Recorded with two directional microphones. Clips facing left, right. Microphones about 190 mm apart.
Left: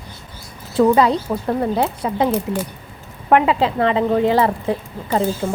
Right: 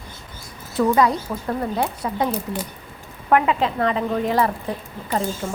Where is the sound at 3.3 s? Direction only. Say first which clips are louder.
Left 3 dB; 30° left (ahead or behind).